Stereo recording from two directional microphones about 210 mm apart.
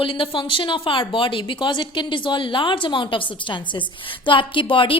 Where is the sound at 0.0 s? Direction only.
25° left (ahead or behind).